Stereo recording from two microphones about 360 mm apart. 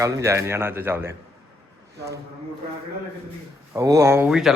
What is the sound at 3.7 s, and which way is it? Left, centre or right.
Speech, centre.